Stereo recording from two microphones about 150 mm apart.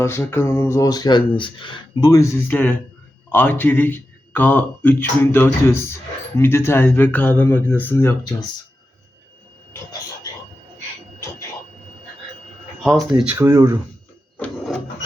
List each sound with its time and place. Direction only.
0.0 s speech: 15° left (ahead or behind)
12.8 s speech: centre (ahead or behind)
13.4 s speech: 20° right (ahead or behind)
14.3 s printer: 10° left (ahead or behind)